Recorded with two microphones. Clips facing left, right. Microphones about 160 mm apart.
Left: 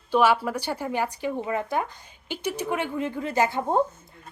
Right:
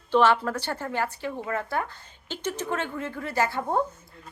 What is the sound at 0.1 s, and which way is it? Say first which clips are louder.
A woman's voice: even; 10° left (ahead or behind).